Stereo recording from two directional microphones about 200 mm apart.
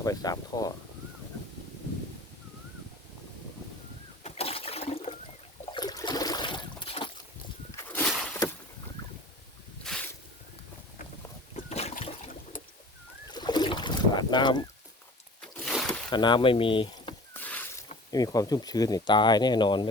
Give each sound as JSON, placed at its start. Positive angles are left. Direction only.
{"t": 0.0, "sound": "speech", "side_deg": 20}
{"t": 4.2, "sound": "water", "side_deg": 30}
{"t": 5.7, "sound": "trickle", "side_deg": 20}
{"t": 7.9, "sound": "a sound", "side_deg": 10}
{"t": 9.8, "sound": "a sound", "side_deg": 5}
{"t": 11.5, "sound": "boat", "side_deg": 30}
{"t": 12.5, "sound": "boat", "side_deg": 40}
{"t": 13.3, "sound": "boat", "side_deg": 20}
{"t": 15.4, "sound": "a sound", "side_deg": 5}
{"t": 16.0, "sound": "speech", "side_deg": 20}
{"t": 17.3, "sound": "a sound", "side_deg": 10}
{"t": 18.1, "sound": "speech", "side_deg": 20}